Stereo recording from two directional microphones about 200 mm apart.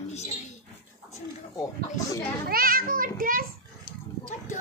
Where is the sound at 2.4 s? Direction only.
45° right (ahead or behind).